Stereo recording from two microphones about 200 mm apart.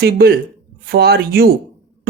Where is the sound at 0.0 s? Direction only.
50° right (ahead or behind).